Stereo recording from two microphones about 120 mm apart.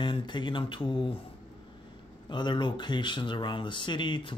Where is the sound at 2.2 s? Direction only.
40° left (ahead or behind).